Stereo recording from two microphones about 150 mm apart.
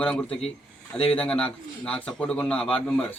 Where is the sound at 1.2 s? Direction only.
5° left (ahead or behind).